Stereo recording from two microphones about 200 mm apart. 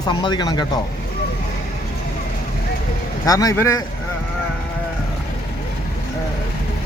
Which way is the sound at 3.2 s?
15° left (ahead or behind).